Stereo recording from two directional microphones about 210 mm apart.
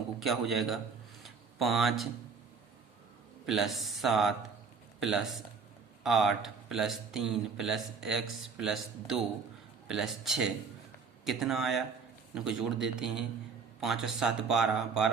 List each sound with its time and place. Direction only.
0.2 s speech: centre (ahead or behind)
1.2 s a sound: centre (ahead or behind)
3.4 s speech: centre (ahead or behind)